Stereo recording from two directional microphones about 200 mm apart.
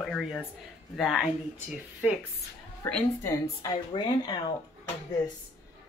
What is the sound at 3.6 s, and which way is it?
Speech, 20° left (ahead or behind).